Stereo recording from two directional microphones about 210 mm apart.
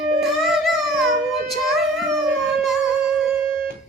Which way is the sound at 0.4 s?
Centre (ahead or behind).